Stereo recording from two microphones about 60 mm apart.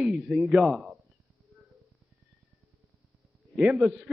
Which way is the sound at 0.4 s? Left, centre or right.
Centre.